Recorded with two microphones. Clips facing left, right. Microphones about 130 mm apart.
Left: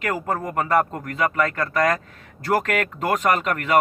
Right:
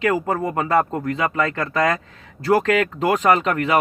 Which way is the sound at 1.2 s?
25° right (ahead or behind).